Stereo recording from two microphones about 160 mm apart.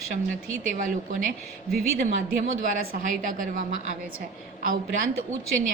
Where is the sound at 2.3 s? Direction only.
55° right (ahead or behind).